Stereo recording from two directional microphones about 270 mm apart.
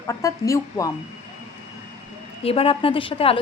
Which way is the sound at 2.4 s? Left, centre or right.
Left.